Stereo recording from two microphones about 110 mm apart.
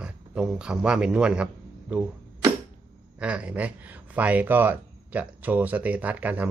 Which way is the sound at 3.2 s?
10° right (ahead or behind).